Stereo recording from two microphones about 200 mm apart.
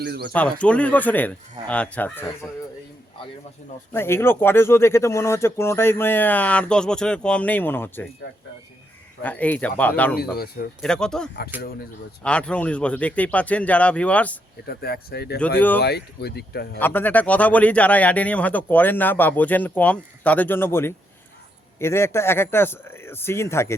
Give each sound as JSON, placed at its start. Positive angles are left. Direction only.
{"t": 0.0, "sound": "speech", "side_deg": -60}
{"t": 0.6, "sound": "speech", "side_deg": 5}
{"t": 3.9, "sound": "speech", "side_deg": 10}
{"t": 9.2, "sound": "speech", "side_deg": 10}
{"t": 10.2, "sound": "speech", "side_deg": 50}
{"t": 10.8, "sound": "speech", "side_deg": 5}
{"t": 14.7, "sound": "speech", "side_deg": 50}
{"t": 16.8, "sound": "speech", "side_deg": 10}